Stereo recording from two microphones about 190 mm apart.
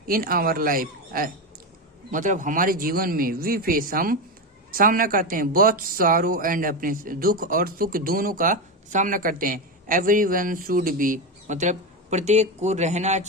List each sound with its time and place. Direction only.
0.1 s speech: 50° right (ahead or behind)